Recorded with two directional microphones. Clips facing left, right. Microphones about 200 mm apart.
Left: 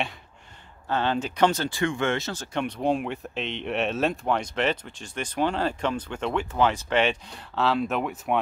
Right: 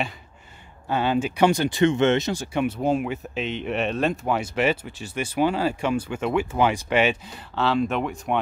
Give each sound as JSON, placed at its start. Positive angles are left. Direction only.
{"t": 0.8, "sound": "speech", "side_deg": -10}